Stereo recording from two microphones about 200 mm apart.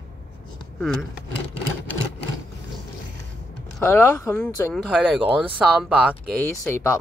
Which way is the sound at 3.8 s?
10° left (ahead or behind).